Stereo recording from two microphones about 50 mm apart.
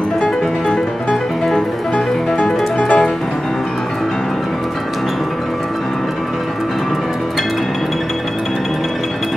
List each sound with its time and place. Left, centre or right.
2.0 s music: centre